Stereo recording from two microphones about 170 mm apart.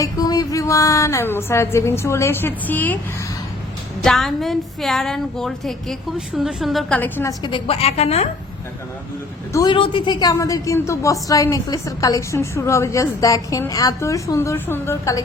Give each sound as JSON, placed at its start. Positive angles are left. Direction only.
{"t": 0.0, "sound": "a woman's voice", "side_deg": 20}
{"t": 4.0, "sound": "a woman's voice", "side_deg": 0}
{"t": 7.0, "sound": "a woman's voice", "side_deg": 15}
{"t": 7.4, "sound": "a woman's voice", "side_deg": 30}
{"t": 9.5, "sound": "a woman's voice", "side_deg": 20}
{"t": 9.7, "sound": "a woman's voice", "side_deg": 30}